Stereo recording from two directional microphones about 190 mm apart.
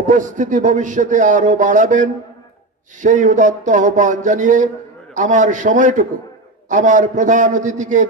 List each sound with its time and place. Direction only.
0.0 s a man's voice: 40° right (ahead or behind)